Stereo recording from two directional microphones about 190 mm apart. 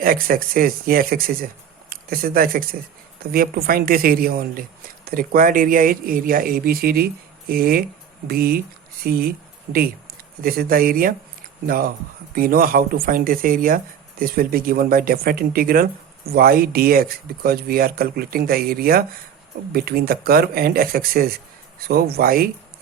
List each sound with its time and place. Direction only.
0.0 s speech: 50° right (ahead or behind)